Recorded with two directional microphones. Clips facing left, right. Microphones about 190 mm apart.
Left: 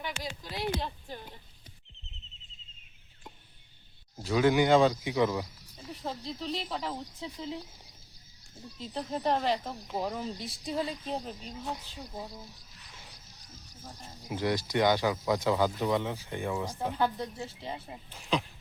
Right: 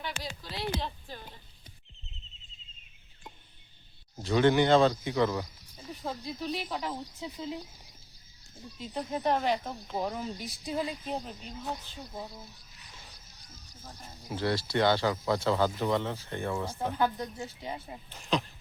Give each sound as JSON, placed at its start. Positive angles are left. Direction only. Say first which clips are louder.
{"t": 0.1, "sound": "speech", "louder": "left 1 dB", "side_deg": -45}
{"t": 0.5, "sound": "speech", "louder": "left 1 dB", "side_deg": 15}
{"t": 4.2, "sound": "speech", "louder": "right 1 dB", "side_deg": 5}
{"t": 5.9, "sound": "speech", "louder": "right 1 dB", "side_deg": 0}
{"t": 8.8, "sound": "speech", "louder": "right 1 dB", "side_deg": -5}
{"t": 14.3, "sound": "speech", "louder": "even", "side_deg": 15}
{"t": 16.7, "sound": "speech", "louder": "right 1 dB", "side_deg": 0}